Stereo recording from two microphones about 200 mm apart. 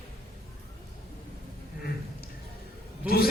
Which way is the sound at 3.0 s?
50° left (ahead or behind).